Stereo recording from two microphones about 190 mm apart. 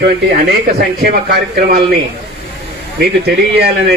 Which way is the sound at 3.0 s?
55° right (ahead or behind).